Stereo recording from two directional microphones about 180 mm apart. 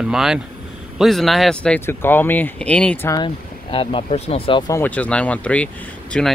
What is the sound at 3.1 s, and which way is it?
Speech, 30° left (ahead or behind).